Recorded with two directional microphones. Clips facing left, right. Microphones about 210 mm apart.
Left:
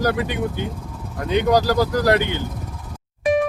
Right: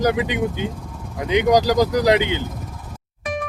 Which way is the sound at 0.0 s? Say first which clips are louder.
Right 2 dB; 15° right (ahead or behind).